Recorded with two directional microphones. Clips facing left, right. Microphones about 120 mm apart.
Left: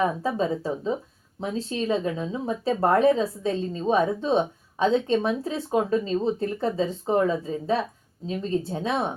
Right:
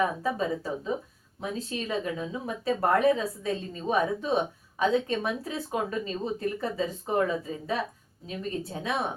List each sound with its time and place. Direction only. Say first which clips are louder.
0.0 s speech: left 3 dB; 30° left (ahead or behind)